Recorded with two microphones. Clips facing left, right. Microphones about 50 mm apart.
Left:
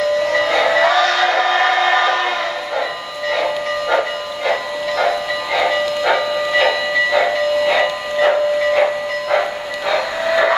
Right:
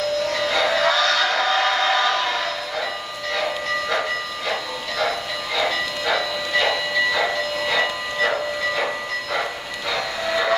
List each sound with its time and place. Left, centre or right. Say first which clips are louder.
0.3 s train: left 6 dB; left
4.5 s vehicle: left 9 dB; left
8.2 s steam: left 8 dB; left
9.8 s train: left 7 dB; left